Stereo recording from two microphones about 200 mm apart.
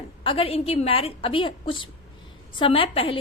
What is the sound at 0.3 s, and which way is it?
A woman's voice, 30° left (ahead or behind).